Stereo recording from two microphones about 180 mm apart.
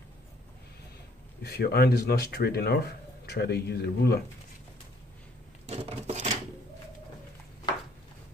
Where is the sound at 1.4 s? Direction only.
60° left (ahead or behind).